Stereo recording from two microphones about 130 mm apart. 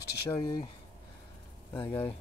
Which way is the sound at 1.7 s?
15° left (ahead or behind).